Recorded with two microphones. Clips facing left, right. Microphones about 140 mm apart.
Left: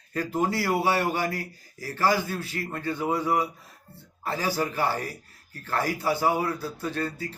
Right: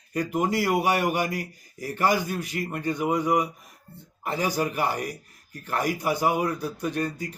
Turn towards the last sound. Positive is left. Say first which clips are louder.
# right 2 dB
turn(degrees=-15)  # may be behind; listen again after turning